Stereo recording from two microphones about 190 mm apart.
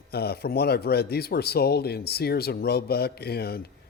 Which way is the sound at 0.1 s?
55° left (ahead or behind).